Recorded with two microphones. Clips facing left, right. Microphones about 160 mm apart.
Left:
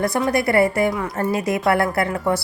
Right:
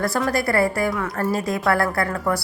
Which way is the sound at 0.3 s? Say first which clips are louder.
Left 4 dB; 20° left (ahead or behind).